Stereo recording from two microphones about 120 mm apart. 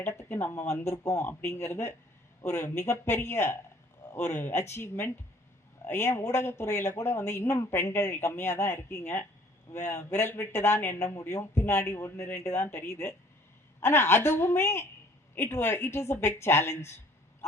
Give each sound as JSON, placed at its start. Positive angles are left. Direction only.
{"t": 0.0, "sound": "a man's voice", "side_deg": 25}